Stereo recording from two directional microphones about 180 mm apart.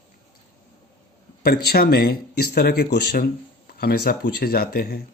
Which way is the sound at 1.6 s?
55° left (ahead or behind).